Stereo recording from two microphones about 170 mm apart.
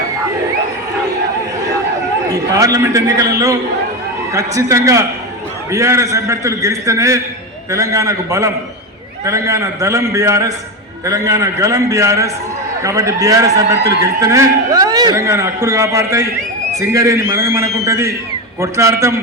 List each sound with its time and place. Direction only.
2.3 s a man's voice: 20° right (ahead or behind)